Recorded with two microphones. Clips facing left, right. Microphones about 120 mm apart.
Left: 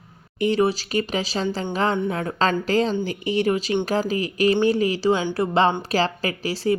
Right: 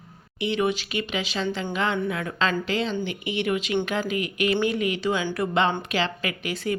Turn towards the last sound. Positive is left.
turn(degrees=30)  # may be behind; listen again after turning